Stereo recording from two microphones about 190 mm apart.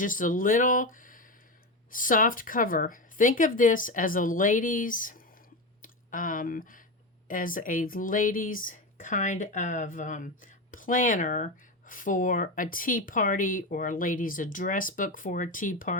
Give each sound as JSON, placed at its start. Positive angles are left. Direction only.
{"t": 0.0, "sound": "speech", "side_deg": 45}